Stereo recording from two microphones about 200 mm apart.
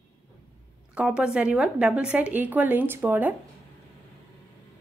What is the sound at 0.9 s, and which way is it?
Speech, 5° right (ahead or behind).